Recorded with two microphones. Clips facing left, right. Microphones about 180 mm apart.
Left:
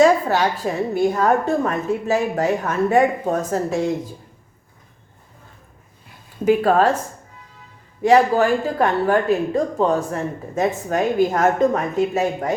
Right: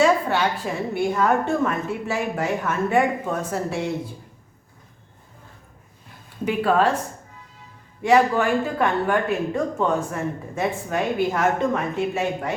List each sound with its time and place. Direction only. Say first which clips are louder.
0.0 s speech: left 4 dB; 40° left (ahead or behind)
6.4 s speech: left 4 dB; 40° left (ahead or behind)
8.0 s speech: left 3 dB; 35° left (ahead or behind)